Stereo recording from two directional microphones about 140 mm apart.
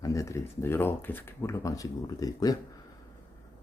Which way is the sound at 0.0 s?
25° left (ahead or behind).